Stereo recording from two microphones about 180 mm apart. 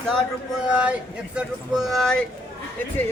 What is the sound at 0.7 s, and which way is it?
Speech, 5° right (ahead or behind).